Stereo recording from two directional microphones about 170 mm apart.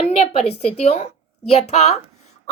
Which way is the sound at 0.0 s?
35° left (ahead or behind).